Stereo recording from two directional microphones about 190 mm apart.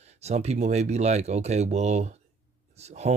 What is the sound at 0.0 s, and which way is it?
Speech, 35° right (ahead or behind).